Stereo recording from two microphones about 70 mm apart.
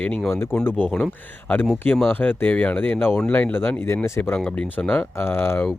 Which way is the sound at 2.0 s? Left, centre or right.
Left.